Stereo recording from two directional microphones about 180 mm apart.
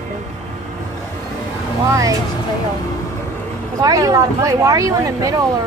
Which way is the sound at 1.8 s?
15° right (ahead or behind).